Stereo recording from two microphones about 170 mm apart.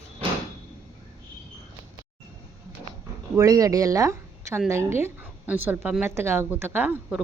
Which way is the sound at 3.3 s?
20° right (ahead or behind).